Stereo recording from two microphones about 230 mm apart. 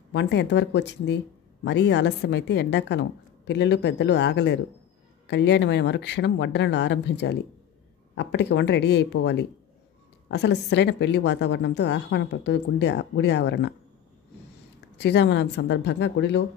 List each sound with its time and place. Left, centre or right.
0.1 s speech: left
15.0 s speech: left